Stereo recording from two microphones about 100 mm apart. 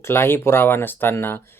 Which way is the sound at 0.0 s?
25° left (ahead or behind).